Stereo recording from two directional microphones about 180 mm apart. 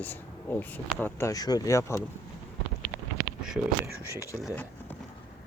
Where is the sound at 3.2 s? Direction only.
Centre (ahead or behind).